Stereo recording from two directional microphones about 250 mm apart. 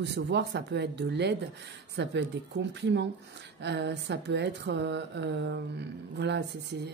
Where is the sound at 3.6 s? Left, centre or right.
Right.